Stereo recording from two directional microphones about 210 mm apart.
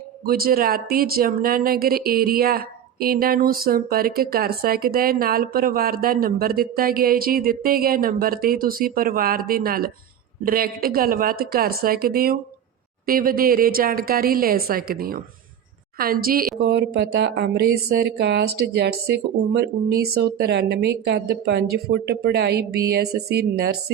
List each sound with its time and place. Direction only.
0.3 s speech: 45° right (ahead or behind)